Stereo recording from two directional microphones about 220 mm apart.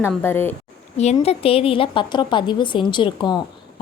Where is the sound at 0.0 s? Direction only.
10° left (ahead or behind).